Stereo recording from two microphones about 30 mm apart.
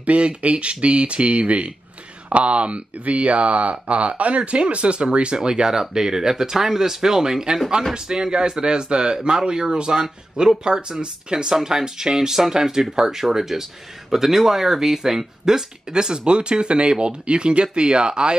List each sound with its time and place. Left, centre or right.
0.0 s speech: right
11.5 s speech: centre
15.9 s speech: right